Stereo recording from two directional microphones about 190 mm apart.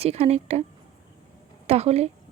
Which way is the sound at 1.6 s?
35° right (ahead or behind).